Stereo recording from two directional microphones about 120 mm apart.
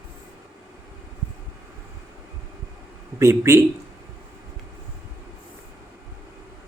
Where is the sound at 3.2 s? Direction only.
25° right (ahead or behind).